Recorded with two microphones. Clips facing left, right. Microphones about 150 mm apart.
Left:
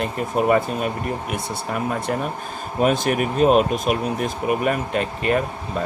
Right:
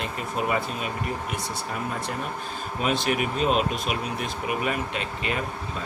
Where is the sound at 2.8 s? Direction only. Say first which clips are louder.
Left 6 dB; 45° left (ahead or behind).